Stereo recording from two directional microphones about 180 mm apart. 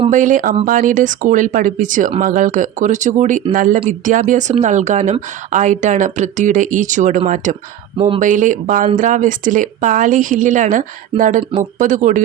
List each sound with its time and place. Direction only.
0.1 s speech: 45° right (ahead or behind)
7.9 s speech: 30° right (ahead or behind)
8.2 s speech: 45° right (ahead or behind)